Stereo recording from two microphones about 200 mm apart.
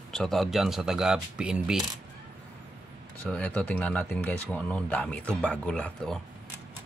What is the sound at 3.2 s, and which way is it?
Speech, 5° left (ahead or behind).